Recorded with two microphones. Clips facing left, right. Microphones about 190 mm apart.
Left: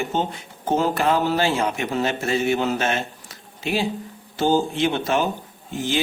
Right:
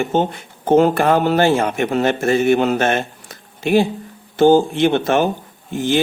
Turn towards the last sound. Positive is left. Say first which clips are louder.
# right 7 dB
turn(degrees=-55)  # may be behind; listen again after turning